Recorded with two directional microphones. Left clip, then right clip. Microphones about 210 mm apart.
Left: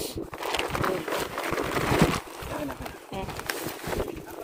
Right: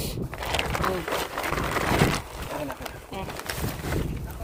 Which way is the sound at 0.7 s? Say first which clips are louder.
Right 1 dB; 45° right (ahead or behind).